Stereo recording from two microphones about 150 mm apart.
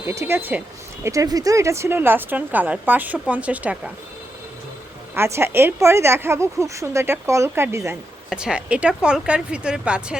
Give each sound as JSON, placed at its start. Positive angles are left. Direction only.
{"t": 0.0, "sound": "speech", "side_deg": -15}
{"t": 1.0, "sound": "speech", "side_deg": -20}
{"t": 5.1, "sound": "speech", "side_deg": -15}
{"t": 8.3, "sound": "speech", "side_deg": -5}